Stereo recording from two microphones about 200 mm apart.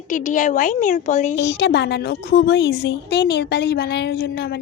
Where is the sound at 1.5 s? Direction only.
60° left (ahead or behind).